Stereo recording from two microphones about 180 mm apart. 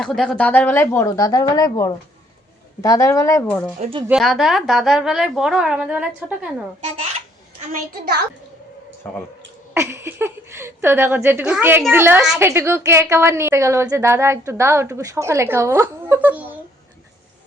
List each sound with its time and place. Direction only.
0.0 s speech: 5° left (ahead or behind)
3.8 s speech: 30° right (ahead or behind)
4.0 s a woman's voice: centre (ahead or behind)
6.8 s a child's voice: 40° right (ahead or behind); by 8.3 s 60° right (ahead or behind)
9.0 s speech: 10° left (ahead or behind)
9.7 s a woman's voice: 15° right (ahead or behind)